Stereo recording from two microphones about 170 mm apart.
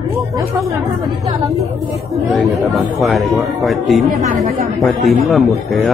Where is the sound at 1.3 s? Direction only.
20° right (ahead or behind).